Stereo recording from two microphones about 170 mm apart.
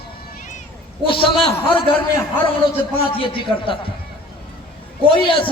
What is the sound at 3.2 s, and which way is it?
Speech, 30° left (ahead or behind).